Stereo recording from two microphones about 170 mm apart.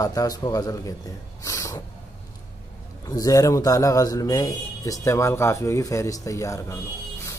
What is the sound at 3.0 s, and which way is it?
A man's voice, 20° left (ahead or behind).